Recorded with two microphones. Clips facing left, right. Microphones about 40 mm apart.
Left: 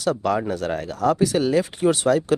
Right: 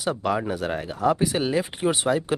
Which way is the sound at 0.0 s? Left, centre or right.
Centre.